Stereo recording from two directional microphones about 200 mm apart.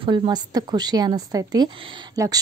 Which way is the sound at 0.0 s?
25° right (ahead or behind).